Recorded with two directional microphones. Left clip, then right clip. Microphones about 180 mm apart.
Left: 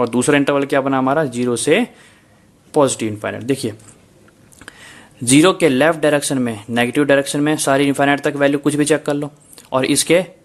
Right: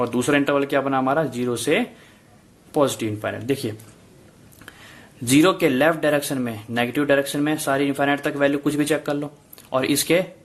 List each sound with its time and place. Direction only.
0.0 s speech: 30° left (ahead or behind)